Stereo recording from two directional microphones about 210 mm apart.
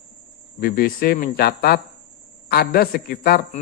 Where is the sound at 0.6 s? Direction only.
45° left (ahead or behind).